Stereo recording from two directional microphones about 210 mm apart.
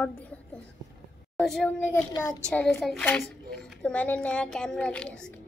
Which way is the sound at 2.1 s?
20° left (ahead or behind).